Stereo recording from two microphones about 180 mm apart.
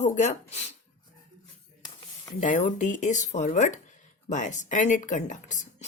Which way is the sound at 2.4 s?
45° left (ahead or behind).